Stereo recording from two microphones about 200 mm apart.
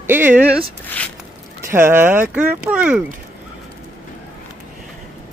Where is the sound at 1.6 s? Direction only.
10° right (ahead or behind).